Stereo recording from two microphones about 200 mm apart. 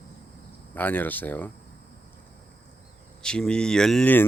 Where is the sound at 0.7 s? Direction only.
10° left (ahead or behind).